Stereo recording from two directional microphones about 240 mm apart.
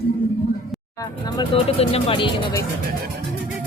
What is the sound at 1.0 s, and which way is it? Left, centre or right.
Speech, centre.